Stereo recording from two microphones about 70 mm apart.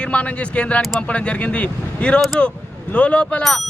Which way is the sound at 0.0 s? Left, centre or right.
Centre.